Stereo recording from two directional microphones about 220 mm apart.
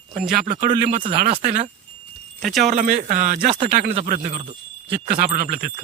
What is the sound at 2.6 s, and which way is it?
Speech, 35° right (ahead or behind).